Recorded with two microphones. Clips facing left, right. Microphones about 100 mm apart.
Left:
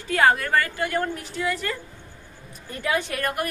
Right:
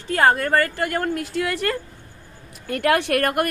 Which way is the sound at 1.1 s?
65° right (ahead or behind).